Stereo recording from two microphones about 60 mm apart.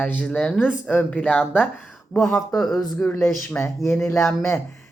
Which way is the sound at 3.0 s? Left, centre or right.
Centre.